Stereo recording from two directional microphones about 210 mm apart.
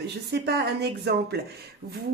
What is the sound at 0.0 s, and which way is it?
Speech, 50° right (ahead or behind).